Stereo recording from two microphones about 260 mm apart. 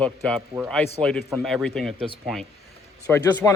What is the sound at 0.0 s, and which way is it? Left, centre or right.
A man's voice, centre.